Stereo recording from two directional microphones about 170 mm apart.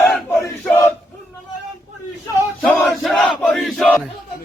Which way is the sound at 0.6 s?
15° left (ahead or behind).